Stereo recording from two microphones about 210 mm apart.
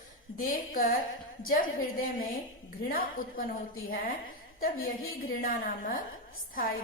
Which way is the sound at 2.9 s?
40° left (ahead or behind).